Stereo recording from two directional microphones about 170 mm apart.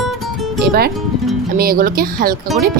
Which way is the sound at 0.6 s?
65° right (ahead or behind).